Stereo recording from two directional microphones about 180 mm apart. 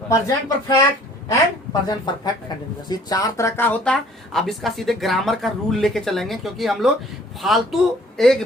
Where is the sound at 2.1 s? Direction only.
25° left (ahead or behind); by 8.3 s centre (ahead or behind).